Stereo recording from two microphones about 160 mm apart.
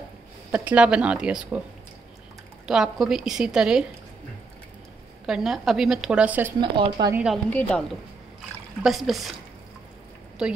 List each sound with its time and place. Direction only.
0.5 s speech: 5° right (ahead or behind)
2.6 s a woman's voice: 5° right (ahead or behind)
5.2 s a woman's voice: 5° right (ahead or behind)
6.6 s speech: 25° right (ahead or behind)
7.4 s a woman's voice: 10° left (ahead or behind)